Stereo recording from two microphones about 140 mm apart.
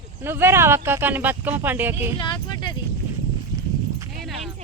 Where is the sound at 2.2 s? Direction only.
35° left (ahead or behind).